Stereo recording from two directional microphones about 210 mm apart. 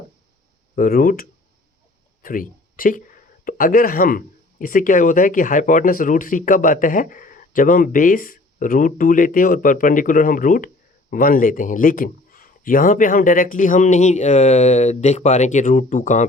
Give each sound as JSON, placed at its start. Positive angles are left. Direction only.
{"t": 0.8, "sound": "speech", "side_deg": 45}